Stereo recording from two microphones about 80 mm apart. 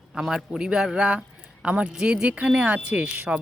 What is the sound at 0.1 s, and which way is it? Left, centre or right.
Speech, centre.